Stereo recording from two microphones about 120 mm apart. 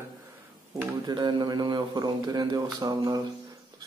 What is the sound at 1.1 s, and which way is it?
A man's voice, 40° right (ahead or behind).